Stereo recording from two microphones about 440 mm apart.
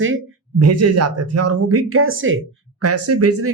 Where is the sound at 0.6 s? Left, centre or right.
Right.